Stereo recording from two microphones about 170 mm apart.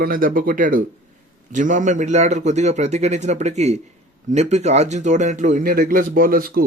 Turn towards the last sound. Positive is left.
turn(degrees=-60)  # may be behind; listen again after turning